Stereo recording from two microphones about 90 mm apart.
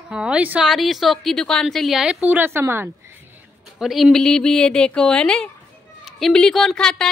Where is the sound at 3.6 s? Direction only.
5° right (ahead or behind).